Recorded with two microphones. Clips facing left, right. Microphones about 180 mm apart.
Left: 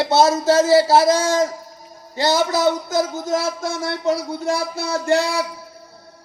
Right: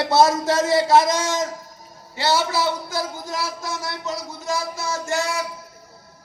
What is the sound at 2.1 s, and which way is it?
Speech, 40° left (ahead or behind).